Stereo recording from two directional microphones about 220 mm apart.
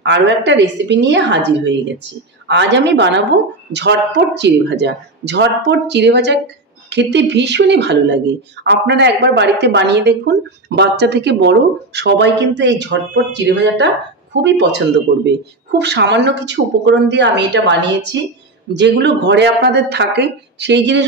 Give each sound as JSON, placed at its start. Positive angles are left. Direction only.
{"t": 0.0, "sound": "a woman's voice", "side_deg": -50}